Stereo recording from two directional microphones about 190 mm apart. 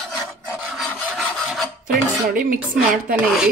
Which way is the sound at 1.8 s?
45° right (ahead or behind).